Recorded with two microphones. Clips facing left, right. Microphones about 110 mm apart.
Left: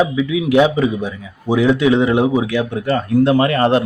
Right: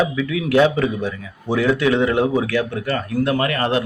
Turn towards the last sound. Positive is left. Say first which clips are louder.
# left 6 dB
turn(degrees=30)  # may be behind; listen again after turning